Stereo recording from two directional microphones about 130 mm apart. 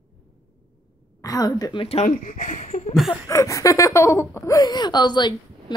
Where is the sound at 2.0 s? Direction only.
75° left (ahead or behind).